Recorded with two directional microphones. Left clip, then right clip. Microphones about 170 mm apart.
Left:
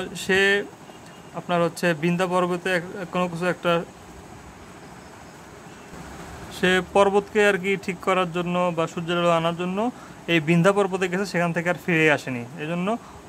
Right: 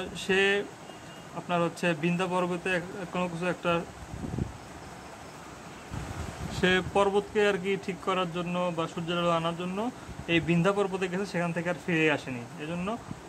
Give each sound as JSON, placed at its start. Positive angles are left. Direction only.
{"t": 0.0, "sound": "speech", "side_deg": 20}
{"t": 6.5, "sound": "speech", "side_deg": 15}